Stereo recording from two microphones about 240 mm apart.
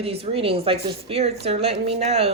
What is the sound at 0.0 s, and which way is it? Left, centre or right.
A woman's voice, right.